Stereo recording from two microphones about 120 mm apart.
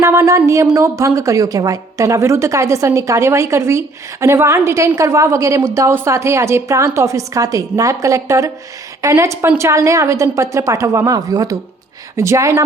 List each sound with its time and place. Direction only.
0.0 s a woman's voice: 25° right (ahead or behind)